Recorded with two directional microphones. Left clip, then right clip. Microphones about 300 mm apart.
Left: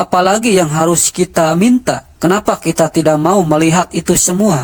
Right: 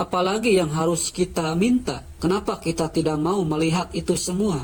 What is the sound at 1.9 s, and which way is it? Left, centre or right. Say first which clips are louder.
Speech: left 11 dB; left.